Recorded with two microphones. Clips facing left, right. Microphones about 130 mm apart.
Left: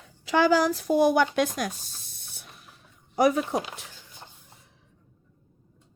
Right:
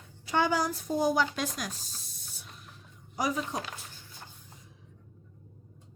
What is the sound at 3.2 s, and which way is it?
Speech, 65° left (ahead or behind).